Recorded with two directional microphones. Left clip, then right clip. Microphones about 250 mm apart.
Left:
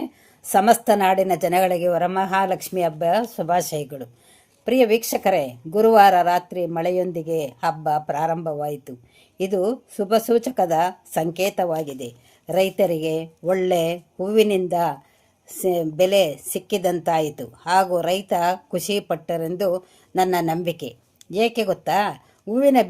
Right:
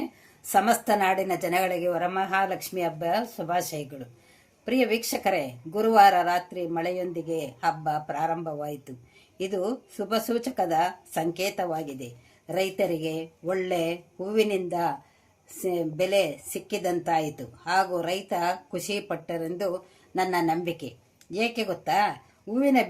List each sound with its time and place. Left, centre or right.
0.4 s a woman's voice: left